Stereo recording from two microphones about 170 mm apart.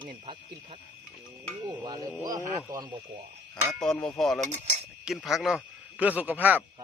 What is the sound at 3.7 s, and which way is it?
Speech, 5° left (ahead or behind).